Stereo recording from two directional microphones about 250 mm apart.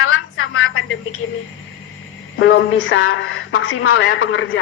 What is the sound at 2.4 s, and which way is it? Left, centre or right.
Speech, left.